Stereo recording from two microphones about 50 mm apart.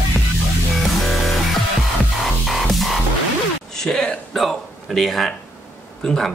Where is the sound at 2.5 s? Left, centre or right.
Centre.